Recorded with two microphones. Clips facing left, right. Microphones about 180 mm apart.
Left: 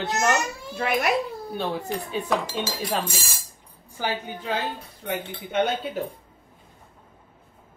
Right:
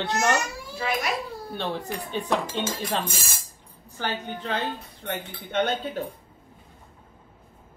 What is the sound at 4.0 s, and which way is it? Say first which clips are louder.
A woman's voice: left 1 dB; 10° left (ahead or behind).